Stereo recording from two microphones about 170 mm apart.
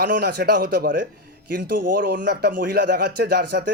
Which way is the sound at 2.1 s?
75° right (ahead or behind).